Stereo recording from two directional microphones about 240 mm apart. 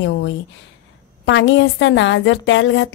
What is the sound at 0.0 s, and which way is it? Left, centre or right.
A woman's voice, left.